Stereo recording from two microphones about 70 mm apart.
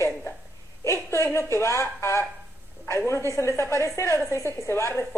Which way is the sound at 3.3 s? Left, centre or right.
Left.